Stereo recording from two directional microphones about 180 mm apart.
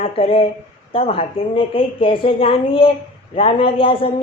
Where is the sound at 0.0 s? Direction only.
30° left (ahead or behind).